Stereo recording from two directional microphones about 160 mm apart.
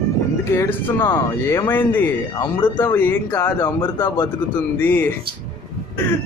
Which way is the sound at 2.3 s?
25° left (ahead or behind).